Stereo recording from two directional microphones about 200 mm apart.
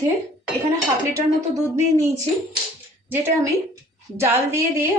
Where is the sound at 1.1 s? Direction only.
15° right (ahead or behind).